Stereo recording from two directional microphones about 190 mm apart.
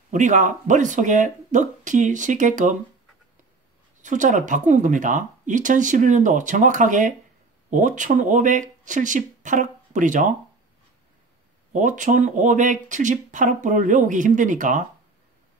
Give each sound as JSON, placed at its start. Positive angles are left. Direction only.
{"t": 0.1, "sound": "speech", "side_deg": -40}
{"t": 4.0, "sound": "speech", "side_deg": -40}
{"t": 11.7, "sound": "speech", "side_deg": -40}